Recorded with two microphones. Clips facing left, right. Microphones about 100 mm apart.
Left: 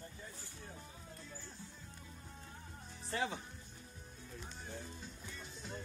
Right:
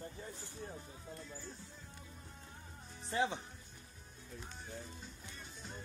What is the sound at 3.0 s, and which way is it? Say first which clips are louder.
Music: right 3 dB; 20° right (ahead or behind).